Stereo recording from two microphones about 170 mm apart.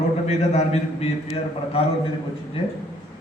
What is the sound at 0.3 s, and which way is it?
Speech, 40° left (ahead or behind).